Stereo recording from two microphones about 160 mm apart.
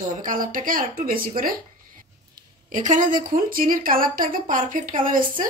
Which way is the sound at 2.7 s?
55° right (ahead or behind).